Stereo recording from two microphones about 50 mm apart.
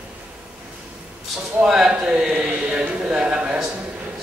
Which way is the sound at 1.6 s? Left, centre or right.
Centre.